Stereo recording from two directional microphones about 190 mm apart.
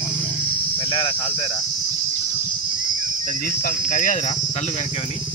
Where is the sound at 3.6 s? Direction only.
45° left (ahead or behind).